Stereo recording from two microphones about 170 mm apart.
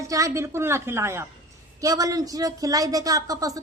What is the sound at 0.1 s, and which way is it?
A woman's voice, 20° right (ahead or behind).